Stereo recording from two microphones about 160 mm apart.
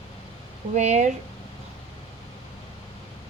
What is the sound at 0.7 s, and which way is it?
Speech, 45° right (ahead or behind).